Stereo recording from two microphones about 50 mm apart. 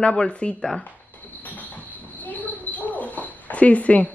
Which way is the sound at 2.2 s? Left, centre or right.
Left.